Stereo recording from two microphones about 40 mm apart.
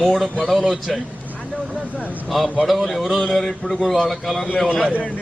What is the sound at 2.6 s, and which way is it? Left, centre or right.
A man's voice, centre.